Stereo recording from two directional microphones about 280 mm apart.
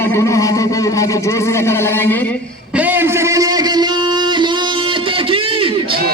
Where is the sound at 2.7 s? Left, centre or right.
Centre.